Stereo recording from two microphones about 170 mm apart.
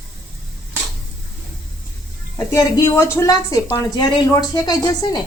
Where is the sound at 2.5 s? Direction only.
15° left (ahead or behind).